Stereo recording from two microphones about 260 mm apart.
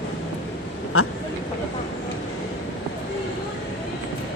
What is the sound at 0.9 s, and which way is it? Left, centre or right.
Speech, left.